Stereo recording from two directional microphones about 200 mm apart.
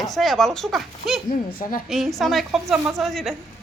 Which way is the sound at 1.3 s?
45° left (ahead or behind).